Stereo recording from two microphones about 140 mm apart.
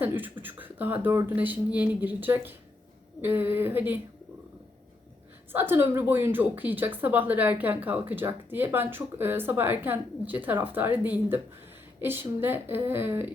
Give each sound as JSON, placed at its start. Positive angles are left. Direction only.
{"t": 0.0, "sound": "a woman's voice", "side_deg": -15}
{"t": 5.5, "sound": "a woman's voice", "side_deg": -15}